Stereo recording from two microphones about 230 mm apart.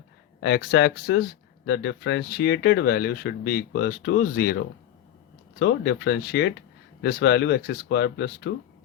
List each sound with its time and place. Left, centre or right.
0.3 s speech: left